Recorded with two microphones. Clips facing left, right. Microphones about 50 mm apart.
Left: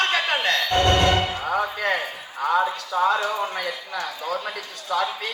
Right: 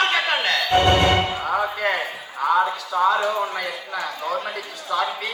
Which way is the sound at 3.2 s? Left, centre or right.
Right.